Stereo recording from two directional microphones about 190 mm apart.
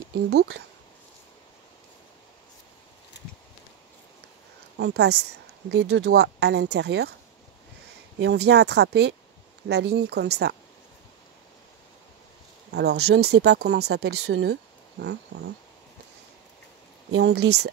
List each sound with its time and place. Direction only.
0.3 s speech: 60° right (ahead or behind)
4.7 s speech: 60° right (ahead or behind)
8.2 s speech: 60° right (ahead or behind)
12.7 s speech: 60° right (ahead or behind)
17.1 s speech: 60° right (ahead or behind)